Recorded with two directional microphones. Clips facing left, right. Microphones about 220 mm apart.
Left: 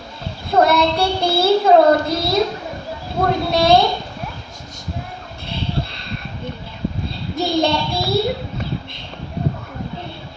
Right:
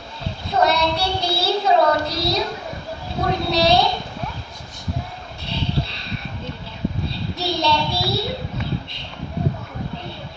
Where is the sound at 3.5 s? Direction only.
55° left (ahead or behind).